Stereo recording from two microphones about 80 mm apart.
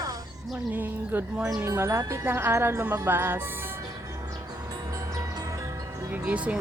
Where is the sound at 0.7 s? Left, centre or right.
Right.